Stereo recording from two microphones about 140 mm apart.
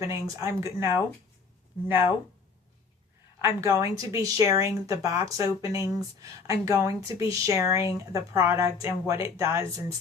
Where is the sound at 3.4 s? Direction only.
20° right (ahead or behind).